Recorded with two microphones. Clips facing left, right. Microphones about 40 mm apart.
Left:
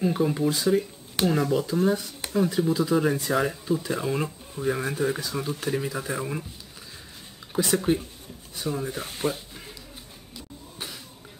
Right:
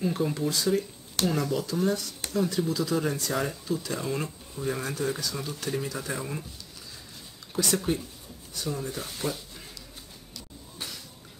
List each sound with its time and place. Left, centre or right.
0.0 s speech: centre
7.5 s speech: centre
10.3 s a sound: centre